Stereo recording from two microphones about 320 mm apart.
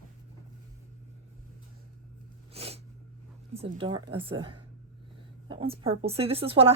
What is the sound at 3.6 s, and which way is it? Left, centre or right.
A woman's voice, centre.